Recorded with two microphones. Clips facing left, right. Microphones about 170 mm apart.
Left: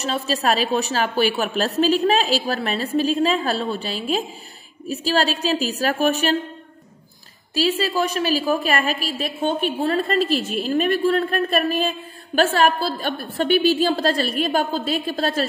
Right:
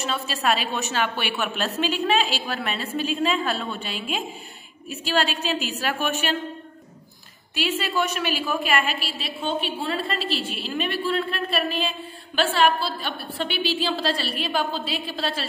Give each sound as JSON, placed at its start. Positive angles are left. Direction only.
{"t": 0.0, "sound": "a woman's voice", "side_deg": 40}
{"t": 7.5, "sound": "a woman's voice", "side_deg": 35}